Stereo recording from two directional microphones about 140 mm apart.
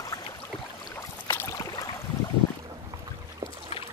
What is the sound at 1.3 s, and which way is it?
Boat, 15° left (ahead or behind).